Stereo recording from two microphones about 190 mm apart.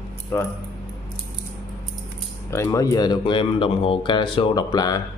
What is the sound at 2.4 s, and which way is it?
Speech, 15° left (ahead or behind).